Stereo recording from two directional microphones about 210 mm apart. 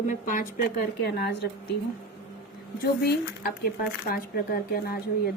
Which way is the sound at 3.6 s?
45° left (ahead or behind).